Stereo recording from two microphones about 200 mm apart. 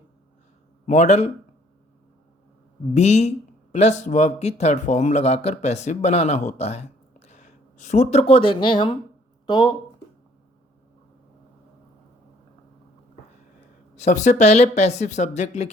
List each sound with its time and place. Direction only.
0.9 s speech: 35° left (ahead or behind)
2.9 s speech: 35° left (ahead or behind)
13.9 s speech: 35° left (ahead or behind)